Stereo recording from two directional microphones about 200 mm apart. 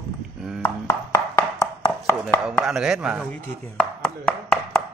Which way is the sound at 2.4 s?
Centre (ahead or behind).